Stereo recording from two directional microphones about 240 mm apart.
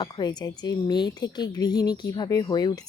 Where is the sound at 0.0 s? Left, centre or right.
Centre.